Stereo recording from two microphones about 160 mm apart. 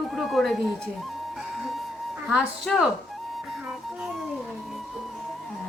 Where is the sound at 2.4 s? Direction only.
Centre (ahead or behind).